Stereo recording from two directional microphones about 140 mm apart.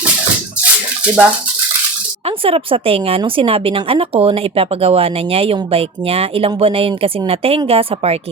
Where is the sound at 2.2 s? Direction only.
40° right (ahead or behind).